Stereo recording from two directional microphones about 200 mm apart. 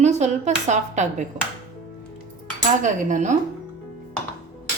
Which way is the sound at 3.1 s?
40° right (ahead or behind).